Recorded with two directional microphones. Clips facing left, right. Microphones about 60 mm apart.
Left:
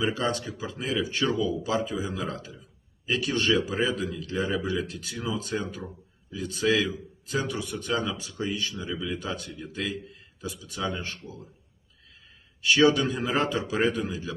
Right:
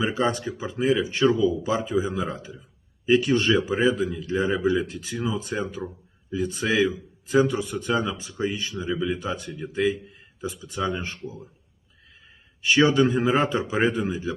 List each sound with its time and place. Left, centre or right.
0.0 s speech: centre
3.8 s speech: centre
12.6 s speech: right